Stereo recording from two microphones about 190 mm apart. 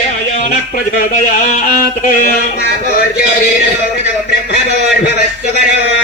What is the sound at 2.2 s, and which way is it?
Speech, 55° left (ahead or behind).